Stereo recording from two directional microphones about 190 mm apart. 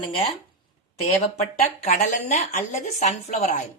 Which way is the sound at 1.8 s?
40° left (ahead or behind).